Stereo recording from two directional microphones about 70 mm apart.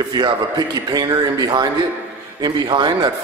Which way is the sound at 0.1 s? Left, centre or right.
Right.